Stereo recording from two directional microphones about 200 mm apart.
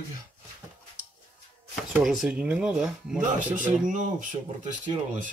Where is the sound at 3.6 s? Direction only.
40° right (ahead or behind).